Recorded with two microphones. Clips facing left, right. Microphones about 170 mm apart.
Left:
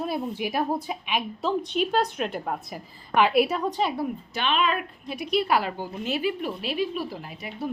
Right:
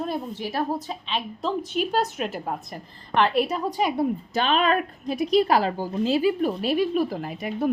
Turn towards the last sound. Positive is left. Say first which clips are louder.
# right 7 dB
turn(degrees=-50)  # may be behind; listen again after turning